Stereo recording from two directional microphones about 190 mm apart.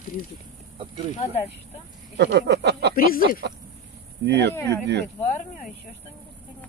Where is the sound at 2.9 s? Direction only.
50° left (ahead or behind).